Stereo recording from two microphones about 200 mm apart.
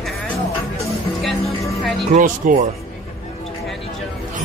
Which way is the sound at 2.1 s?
40° right (ahead or behind).